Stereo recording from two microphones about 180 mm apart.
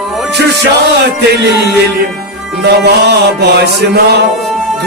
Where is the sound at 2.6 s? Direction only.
65° right (ahead or behind).